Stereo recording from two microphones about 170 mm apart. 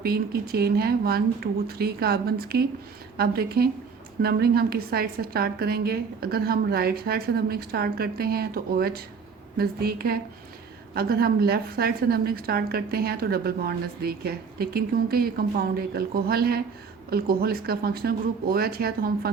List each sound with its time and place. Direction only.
0.0 s a woman's voice: 65° right (ahead or behind)